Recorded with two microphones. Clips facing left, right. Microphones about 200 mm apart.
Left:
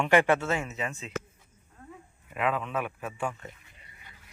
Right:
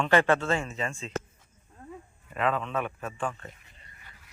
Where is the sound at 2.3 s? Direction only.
10° left (ahead or behind).